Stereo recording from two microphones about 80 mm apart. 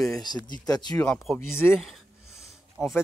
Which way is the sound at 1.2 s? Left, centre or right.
Centre.